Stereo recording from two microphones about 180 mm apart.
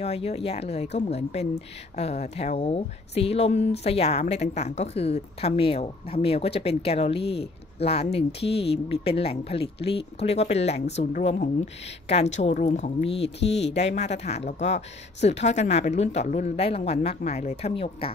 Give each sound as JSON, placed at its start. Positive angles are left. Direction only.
{"t": 0.0, "sound": "speech", "side_deg": 35}